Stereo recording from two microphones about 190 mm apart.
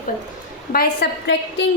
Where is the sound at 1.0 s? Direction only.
60° left (ahead or behind).